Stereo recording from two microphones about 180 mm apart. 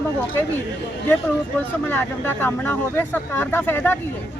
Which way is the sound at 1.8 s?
10° left (ahead or behind).